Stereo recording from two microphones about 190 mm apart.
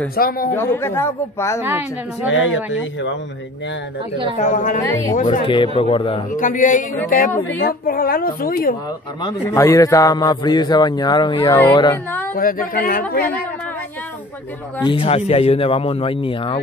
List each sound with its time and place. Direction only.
0.1 s speech: 50° left (ahead or behind)
0.6 s speech: 10° left (ahead or behind)
2.2 s speech: 85° left
4.4 s a woman's voice: 40° left (ahead or behind)
5.4 s a man's voice: 25° left (ahead or behind)
6.3 s speech: 45° left (ahead or behind)
9.2 s a man's voice: 15° left (ahead or behind)
12.4 s speech: 45° left (ahead or behind)
14.9 s a man's voice: 30° left (ahead or behind)